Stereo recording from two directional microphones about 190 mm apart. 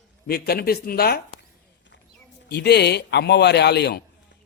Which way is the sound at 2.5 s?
60° left (ahead or behind).